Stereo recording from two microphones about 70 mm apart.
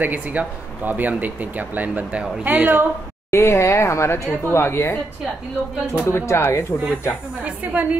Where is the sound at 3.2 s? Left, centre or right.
Left.